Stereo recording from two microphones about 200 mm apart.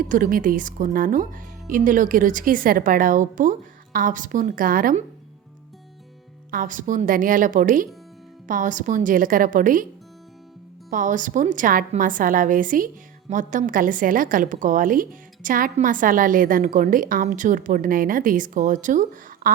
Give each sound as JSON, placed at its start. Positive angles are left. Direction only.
{"t": 0.1, "sound": "speech", "side_deg": -40}
{"t": 6.5, "sound": "a woman's voice", "side_deg": -40}
{"t": 10.8, "sound": "a woman's voice", "side_deg": -40}